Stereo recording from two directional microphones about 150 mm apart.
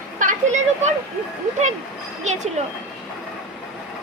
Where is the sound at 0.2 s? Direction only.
55° right (ahead or behind).